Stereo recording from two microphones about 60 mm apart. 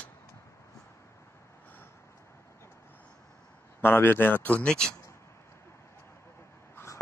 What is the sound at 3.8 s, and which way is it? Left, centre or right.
Speech, left.